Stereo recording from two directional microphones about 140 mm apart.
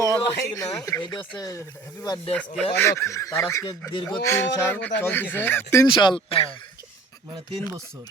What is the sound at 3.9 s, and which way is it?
Speech, 35° left (ahead or behind).